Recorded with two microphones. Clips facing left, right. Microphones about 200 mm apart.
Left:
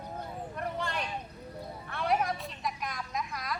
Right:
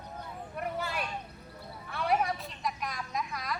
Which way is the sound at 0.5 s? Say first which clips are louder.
Right 1 dB; 5° right (ahead or behind).